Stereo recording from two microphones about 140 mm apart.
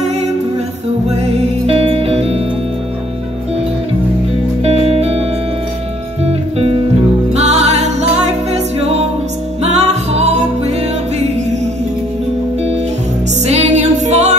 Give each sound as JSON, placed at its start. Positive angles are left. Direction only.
{"t": 1.7, "sound": "music", "side_deg": -45}
{"t": 4.6, "sound": "music", "side_deg": -45}
{"t": 6.2, "sound": "music", "side_deg": -45}
{"t": 13.4, "sound": "music", "side_deg": -55}